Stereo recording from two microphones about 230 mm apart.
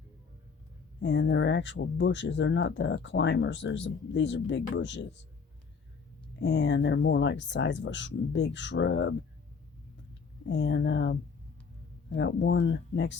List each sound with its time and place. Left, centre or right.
1.0 s speech: left
6.4 s speech: left
10.4 s speech: left